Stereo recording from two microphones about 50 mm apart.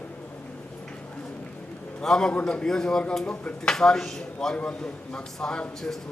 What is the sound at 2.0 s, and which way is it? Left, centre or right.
A man's voice, centre.